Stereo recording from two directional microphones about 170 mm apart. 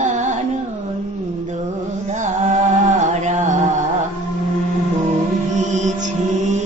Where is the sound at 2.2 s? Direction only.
45° right (ahead or behind).